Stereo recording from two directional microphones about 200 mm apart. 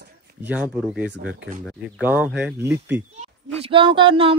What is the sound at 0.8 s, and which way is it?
Speech, 5° right (ahead or behind).